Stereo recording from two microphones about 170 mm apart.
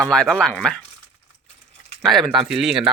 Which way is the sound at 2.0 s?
Centre (ahead or behind).